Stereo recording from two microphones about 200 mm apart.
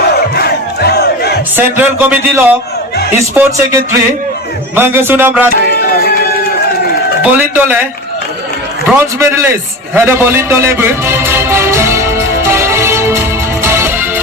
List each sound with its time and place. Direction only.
0.3 s crowd: 50° left (ahead or behind)
1.5 s speech: 10° right (ahead or behind)
7.2 s speech: 10° right (ahead or behind)
8.9 s speech: 15° right (ahead or behind)
9.9 s music: 10° right (ahead or behind)